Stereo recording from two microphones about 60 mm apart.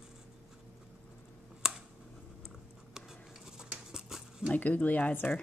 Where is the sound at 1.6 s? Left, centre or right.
Centre.